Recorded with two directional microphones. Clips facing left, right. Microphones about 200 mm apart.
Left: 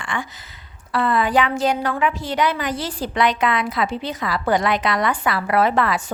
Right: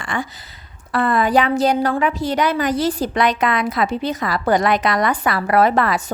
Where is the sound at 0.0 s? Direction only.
40° right (ahead or behind).